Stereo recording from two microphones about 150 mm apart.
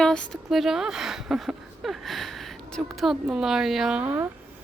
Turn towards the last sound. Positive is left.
turn(degrees=-10)  # may be behind; listen again after turning